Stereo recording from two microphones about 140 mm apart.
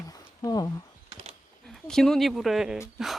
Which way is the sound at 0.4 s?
25° left (ahead or behind).